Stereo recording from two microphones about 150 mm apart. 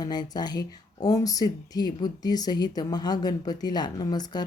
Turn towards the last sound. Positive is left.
turn(degrees=30)  # may be behind; listen again after turning